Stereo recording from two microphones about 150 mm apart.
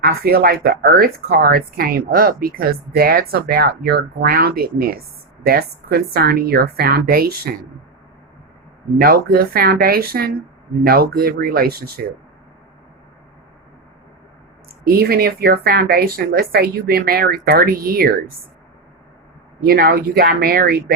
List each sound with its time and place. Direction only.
0.0 s a woman's voice: 90° right
9.0 s speech: 80° right
14.7 s speech: 90° right
19.6 s a woman's voice: 90° right